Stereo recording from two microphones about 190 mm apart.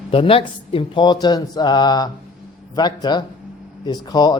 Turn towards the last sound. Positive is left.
turn(degrees=20)  # may be behind; listen again after turning